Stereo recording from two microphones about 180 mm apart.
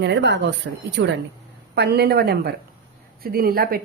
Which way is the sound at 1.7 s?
65° right (ahead or behind).